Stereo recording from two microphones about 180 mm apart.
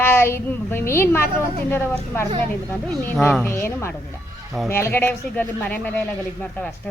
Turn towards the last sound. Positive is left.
turn(degrees=10)  # may be behind; listen again after turning